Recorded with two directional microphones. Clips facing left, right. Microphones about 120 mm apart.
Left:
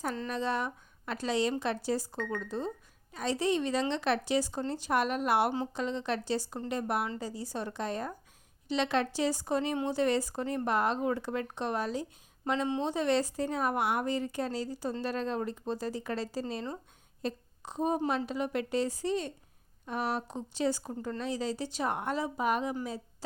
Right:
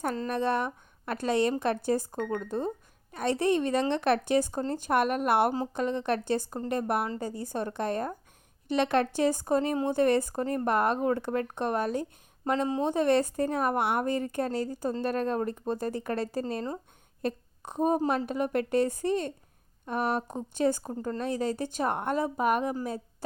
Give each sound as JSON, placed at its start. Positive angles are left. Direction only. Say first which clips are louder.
{"t": 0.0, "sound": "a woman's voice", "louder": "right 4 dB", "side_deg": -50}
{"t": 12.5, "sound": "a woman's voice", "louder": "right 3 dB", "side_deg": -40}
{"t": 18.3, "sound": "a woman's voice", "louder": "right 4 dB", "side_deg": -50}